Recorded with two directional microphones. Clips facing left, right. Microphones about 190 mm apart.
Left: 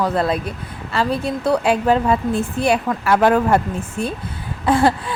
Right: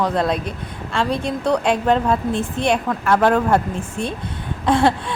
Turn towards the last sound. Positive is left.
turn(degrees=5)  # may be behind; listen again after turning